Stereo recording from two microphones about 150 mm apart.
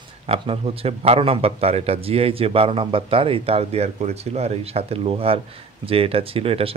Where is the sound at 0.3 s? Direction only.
40° right (ahead or behind).